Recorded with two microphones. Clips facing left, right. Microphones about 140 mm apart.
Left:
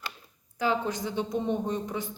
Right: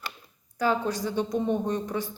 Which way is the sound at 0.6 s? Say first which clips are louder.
Right 2 dB; 20° left (ahead or behind).